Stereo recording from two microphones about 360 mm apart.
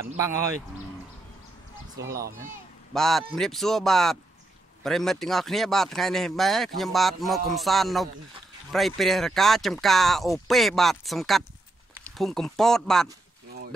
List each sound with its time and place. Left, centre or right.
2.0 s speech: right
2.9 s speech: centre